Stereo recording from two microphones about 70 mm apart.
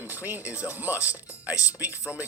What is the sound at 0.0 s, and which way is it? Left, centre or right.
Speech, right.